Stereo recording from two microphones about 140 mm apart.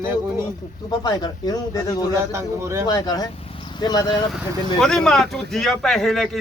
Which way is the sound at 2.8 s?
30° left (ahead or behind).